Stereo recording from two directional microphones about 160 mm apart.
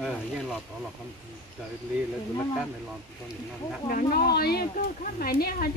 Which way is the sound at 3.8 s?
60° left (ahead or behind).